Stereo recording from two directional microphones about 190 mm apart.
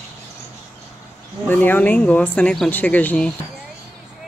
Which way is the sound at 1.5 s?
10° left (ahead or behind).